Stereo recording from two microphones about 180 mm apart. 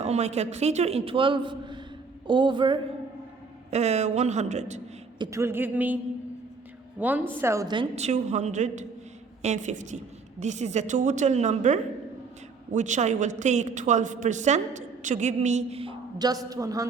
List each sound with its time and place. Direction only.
0.0 s a woman's voice: 35° right (ahead or behind)
3.7 s a woman's voice: 40° right (ahead or behind)
5.2 s speech: 15° right (ahead or behind)
7.0 s a woman's voice: 10° right (ahead or behind)
7.9 s a woman's voice: 40° right (ahead or behind); by 16.8 s 20° right (ahead or behind)